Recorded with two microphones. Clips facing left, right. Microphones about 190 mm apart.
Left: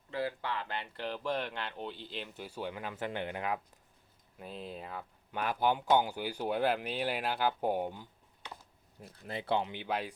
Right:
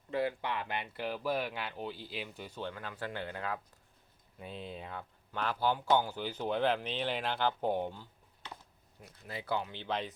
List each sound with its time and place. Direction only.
0.1 s speech: 20° right (ahead or behind); by 3.6 s 15° left (ahead or behind)
4.4 s speech: centre (ahead or behind)
5.3 s speech: 15° left (ahead or behind)
9.2 s speech: 25° left (ahead or behind)
9.7 s speech: 10° left (ahead or behind)